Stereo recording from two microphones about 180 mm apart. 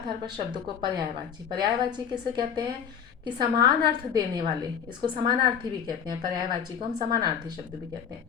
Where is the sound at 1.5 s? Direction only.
25° right (ahead or behind).